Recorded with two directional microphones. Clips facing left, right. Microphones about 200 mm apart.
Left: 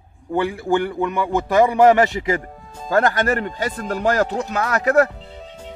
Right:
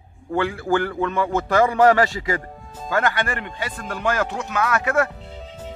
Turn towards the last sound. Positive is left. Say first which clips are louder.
# even
turn(degrees=0)  # may be behind; listen again after turning